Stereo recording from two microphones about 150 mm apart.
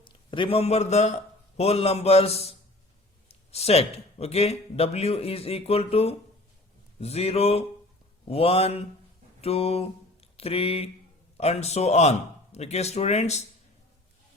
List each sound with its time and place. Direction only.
0.0 s a man's voice: 35° left (ahead or behind)